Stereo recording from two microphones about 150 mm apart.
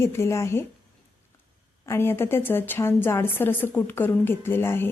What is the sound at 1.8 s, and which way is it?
A woman's voice, 15° left (ahead or behind).